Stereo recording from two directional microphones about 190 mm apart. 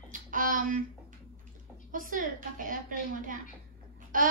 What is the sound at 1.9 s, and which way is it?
Child singing, 45° right (ahead or behind).